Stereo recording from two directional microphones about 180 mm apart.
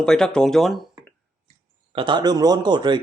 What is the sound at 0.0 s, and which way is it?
Speech, 5° left (ahead or behind).